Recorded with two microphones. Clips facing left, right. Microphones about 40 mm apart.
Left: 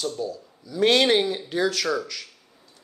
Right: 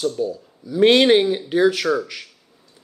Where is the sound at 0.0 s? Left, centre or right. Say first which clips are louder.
Right 6 dB; centre.